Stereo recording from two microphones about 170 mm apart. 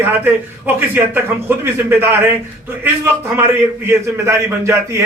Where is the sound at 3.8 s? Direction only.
15° right (ahead or behind).